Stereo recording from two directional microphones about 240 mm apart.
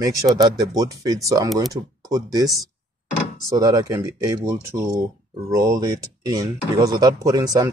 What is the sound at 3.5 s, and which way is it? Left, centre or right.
Speech, centre.